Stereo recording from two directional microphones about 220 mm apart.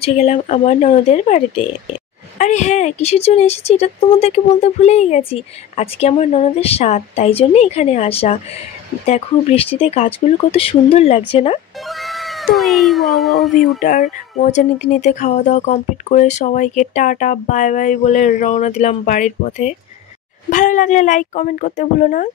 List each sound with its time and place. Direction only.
0.0 s speech: 30° left (ahead or behind)
11.9 s speech: centre (ahead or behind)
13.7 s speech: 35° left (ahead or behind)